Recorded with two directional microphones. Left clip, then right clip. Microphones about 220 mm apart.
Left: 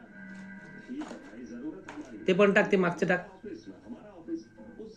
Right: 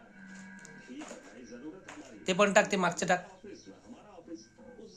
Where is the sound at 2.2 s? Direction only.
30° right (ahead or behind).